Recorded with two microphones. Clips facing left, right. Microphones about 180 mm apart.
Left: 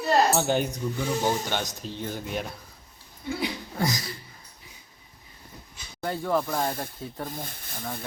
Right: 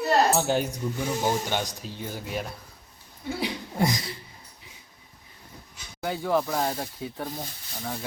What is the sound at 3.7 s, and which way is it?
Speech, 25° right (ahead or behind).